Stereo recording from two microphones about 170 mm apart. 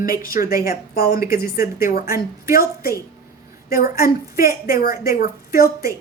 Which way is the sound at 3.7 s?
55° left (ahead or behind).